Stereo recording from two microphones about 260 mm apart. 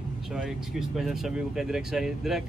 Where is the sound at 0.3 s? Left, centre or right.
Centre.